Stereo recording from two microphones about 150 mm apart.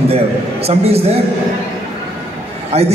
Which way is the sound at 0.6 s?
40° right (ahead or behind).